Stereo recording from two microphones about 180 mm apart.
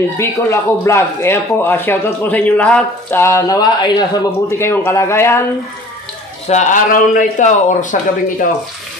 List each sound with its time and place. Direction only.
0.2 s speech: 15° left (ahead or behind)
6.4 s speech: 40° left (ahead or behind)